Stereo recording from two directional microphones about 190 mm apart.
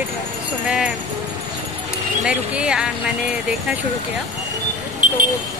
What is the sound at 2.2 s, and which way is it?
Speech, 5° right (ahead or behind).